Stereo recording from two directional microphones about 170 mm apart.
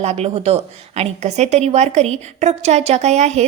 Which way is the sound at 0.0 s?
40° right (ahead or behind).